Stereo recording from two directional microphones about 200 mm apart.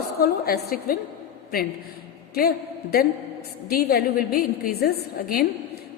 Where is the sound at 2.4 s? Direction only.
50° left (ahead or behind).